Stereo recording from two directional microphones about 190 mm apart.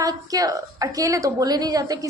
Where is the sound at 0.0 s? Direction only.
20° right (ahead or behind).